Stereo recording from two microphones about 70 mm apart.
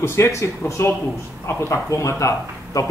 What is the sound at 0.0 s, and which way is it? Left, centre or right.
A man's voice, left.